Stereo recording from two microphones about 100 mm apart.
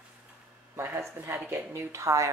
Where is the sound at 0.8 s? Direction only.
25° right (ahead or behind).